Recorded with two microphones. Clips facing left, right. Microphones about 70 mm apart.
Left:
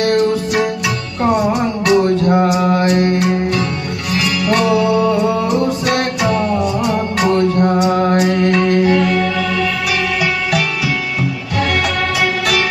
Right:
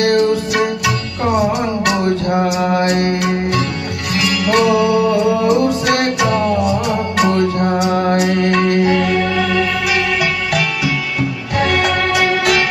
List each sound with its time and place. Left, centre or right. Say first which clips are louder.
0.0 s music: right 1 dB; right
2.7 s music: left 1 dB; right
11.5 s music: right 2 dB; right